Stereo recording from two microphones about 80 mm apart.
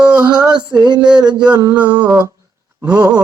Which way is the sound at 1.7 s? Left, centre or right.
Centre.